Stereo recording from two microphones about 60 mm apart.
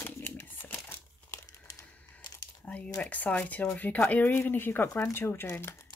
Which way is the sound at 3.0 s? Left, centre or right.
Left.